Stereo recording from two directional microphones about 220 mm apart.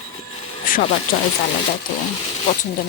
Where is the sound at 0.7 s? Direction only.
40° left (ahead or behind).